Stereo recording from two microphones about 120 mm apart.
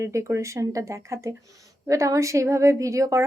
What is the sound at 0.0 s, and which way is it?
A woman's voice, 25° right (ahead or behind).